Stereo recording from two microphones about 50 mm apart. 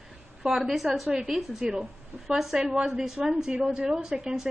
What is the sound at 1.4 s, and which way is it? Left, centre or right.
A woman's voice, centre.